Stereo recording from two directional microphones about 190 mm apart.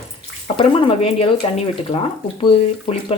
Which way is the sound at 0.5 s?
25° left (ahead or behind).